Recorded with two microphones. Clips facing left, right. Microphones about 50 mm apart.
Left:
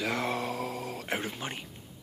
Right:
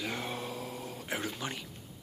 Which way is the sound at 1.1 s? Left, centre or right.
Left.